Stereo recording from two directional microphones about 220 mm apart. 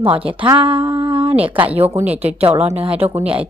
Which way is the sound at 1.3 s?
5° right (ahead or behind).